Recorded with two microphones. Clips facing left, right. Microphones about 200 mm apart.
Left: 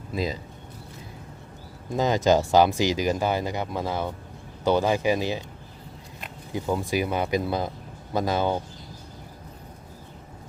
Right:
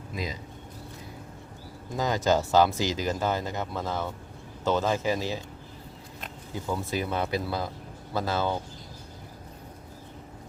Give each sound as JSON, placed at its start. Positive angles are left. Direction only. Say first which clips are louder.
{"t": 0.1, "sound": "speech", "louder": "left 7 dB", "side_deg": 30}
{"t": 2.0, "sound": "speech", "louder": "left 4 dB", "side_deg": 20}
{"t": 6.5, "sound": "speech", "louder": "left 5 dB", "side_deg": 15}